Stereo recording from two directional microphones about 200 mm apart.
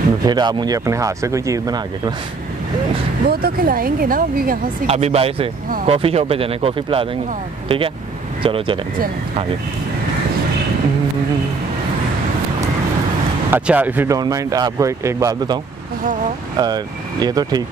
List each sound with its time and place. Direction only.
0.2 s speech: 20° right (ahead or behind)
3.3 s speech: 50° right (ahead or behind)
4.8 s speech: 30° right (ahead or behind)
13.5 s speech: 10° right (ahead or behind)